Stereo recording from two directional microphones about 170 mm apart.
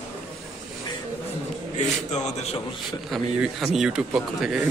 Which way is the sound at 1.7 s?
40° left (ahead or behind).